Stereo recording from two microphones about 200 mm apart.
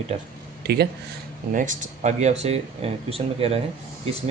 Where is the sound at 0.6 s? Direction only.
50° right (ahead or behind).